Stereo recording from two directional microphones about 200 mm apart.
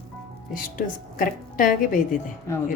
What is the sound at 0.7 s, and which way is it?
A woman's voice, 45° left (ahead or behind).